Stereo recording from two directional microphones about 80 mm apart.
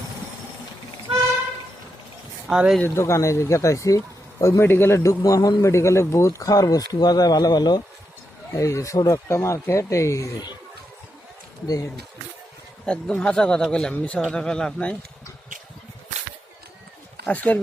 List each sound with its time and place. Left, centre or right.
2.5 s speech: centre
2.9 s speech: left
4.6 s speech: left
5.6 s speech: left
8.5 s speech: left
9.3 s speech: left
12.8 s speech: centre
13.9 s speech: centre
17.2 s speech: centre